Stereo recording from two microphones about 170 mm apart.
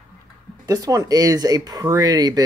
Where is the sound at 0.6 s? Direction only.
20° right (ahead or behind).